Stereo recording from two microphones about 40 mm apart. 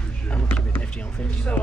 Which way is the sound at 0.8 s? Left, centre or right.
Left.